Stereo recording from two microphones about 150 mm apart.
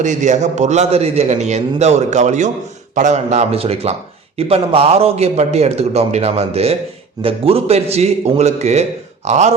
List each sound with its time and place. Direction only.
0.0 s a man's voice: 55° right (ahead or behind)